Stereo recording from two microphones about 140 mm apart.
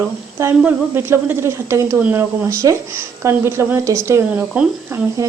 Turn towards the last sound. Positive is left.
turn(degrees=-15)  # may be behind; listen again after turning